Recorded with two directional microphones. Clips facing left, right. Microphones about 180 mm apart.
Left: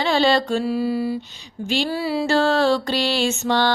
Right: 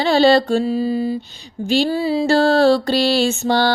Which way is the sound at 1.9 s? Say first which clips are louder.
Right 4 dB; 25° right (ahead or behind).